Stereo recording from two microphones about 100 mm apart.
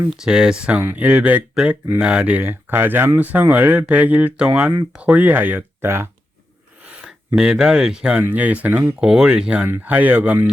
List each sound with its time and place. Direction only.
0.1 s speech: 5° right (ahead or behind); by 6.1 s 25° right (ahead or behind)
6.8 s a sound: 10° right (ahead or behind)
7.3 s speech: 5° right (ahead or behind)